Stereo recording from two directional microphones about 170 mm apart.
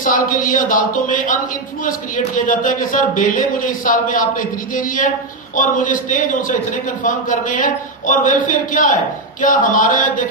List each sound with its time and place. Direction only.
0.0 s a man's voice: 50° left (ahead or behind)